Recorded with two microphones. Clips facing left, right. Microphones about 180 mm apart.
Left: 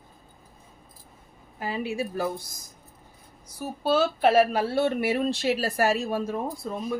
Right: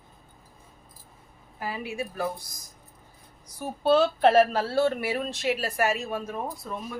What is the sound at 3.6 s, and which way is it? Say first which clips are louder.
Speech: right 2 dB; 5° left (ahead or behind).